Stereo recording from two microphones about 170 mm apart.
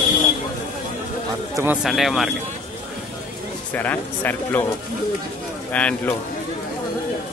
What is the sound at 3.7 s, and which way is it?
Speech, 10° left (ahead or behind).